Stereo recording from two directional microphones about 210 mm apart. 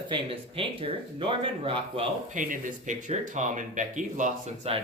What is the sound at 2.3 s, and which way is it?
Speech, 40° right (ahead or behind).